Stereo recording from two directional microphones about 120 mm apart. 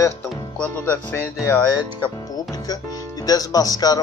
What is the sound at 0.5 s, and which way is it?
Speech, 10° left (ahead or behind).